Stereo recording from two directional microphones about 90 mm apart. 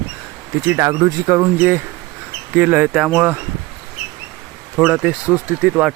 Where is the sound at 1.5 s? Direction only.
20° right (ahead or behind).